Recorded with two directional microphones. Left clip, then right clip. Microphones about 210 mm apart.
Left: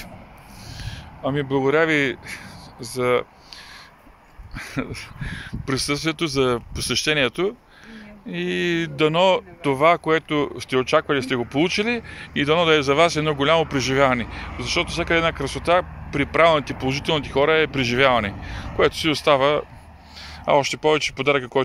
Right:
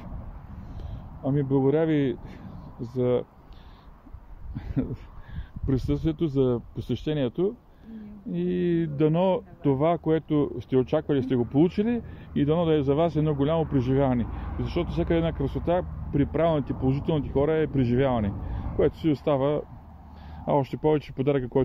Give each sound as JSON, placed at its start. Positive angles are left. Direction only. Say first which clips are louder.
{"t": 1.2, "sound": "speech", "louder": "left 3 dB", "side_deg": -5}
{"t": 4.6, "sound": "speech", "louder": "left 4 dB", "side_deg": -10}
{"t": 14.6, "sound": "speech", "louder": "left 6 dB", "side_deg": -20}